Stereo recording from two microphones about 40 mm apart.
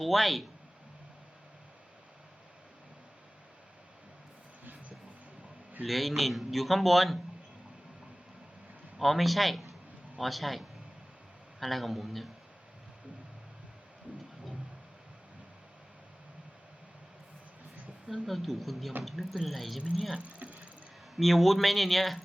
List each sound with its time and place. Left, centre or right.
0.0 s a man's voice: centre
4.6 s a sound: right
5.8 s a man's voice: centre
9.0 s a man's voice: centre
18.1 s a man's voice: centre
20.1 s speech: right
21.2 s a man's voice: centre